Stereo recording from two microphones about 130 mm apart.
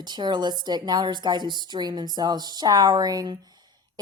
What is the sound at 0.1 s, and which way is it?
A woman's voice, 35° right (ahead or behind).